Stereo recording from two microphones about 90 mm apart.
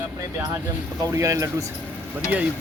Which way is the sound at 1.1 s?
40° right (ahead or behind).